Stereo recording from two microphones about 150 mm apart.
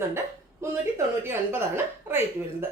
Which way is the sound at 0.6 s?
15° right (ahead or behind).